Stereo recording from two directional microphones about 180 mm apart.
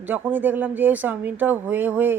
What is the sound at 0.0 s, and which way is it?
Speech, 10° right (ahead or behind).